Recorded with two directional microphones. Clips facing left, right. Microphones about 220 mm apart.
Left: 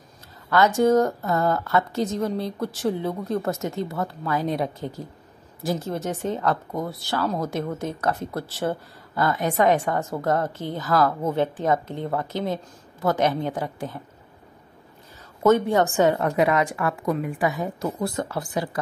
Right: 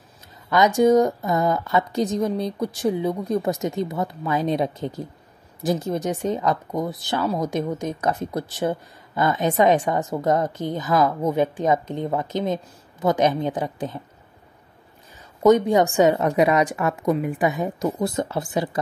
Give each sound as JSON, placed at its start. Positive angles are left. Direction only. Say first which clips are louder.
{"t": 0.5, "sound": "a woman's voice", "louder": "right 2 dB", "side_deg": -15}
{"t": 15.4, "sound": "a woman's voice", "louder": "right 3 dB", "side_deg": -15}